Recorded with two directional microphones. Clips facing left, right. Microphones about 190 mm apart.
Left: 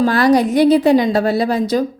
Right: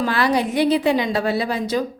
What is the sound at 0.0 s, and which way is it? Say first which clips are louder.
A woman's voice: left 7 dB; 40° left (ahead or behind).